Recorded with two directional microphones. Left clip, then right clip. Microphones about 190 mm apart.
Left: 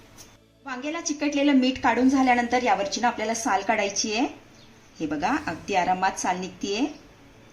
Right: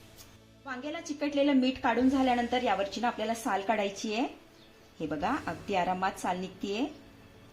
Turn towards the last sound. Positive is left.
turn(degrees=-25)  # may be behind; listen again after turning